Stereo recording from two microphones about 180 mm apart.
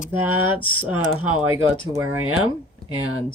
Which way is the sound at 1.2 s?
30° left (ahead or behind).